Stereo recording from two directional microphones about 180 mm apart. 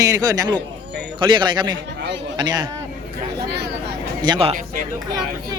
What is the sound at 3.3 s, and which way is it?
Vehicle, 65° right (ahead or behind).